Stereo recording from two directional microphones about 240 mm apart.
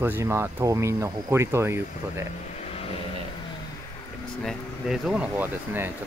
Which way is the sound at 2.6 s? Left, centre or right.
Left.